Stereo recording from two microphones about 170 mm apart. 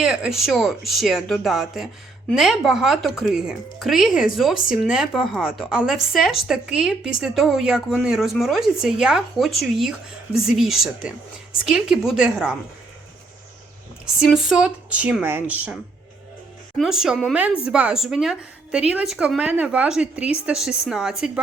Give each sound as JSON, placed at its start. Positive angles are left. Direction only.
{"t": 0.0, "sound": "speech", "side_deg": -5}
{"t": 4.5, "sound": "speech", "side_deg": 55}
{"t": 4.9, "sound": "speech", "side_deg": -5}
{"t": 14.2, "sound": "speech", "side_deg": -5}